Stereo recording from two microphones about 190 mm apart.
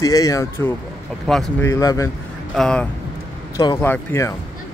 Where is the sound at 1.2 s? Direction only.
Centre (ahead or behind).